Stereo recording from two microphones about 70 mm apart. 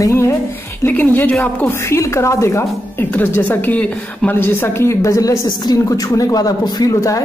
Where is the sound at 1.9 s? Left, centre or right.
Left.